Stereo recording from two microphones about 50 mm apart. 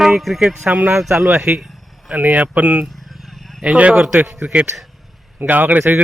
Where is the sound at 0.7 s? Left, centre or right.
Right.